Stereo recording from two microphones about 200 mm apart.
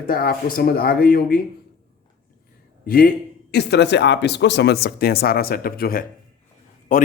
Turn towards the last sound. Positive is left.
turn(degrees=45)  # may be behind; listen again after turning